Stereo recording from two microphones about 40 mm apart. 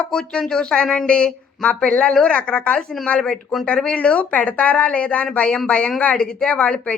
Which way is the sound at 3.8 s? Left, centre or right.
Left.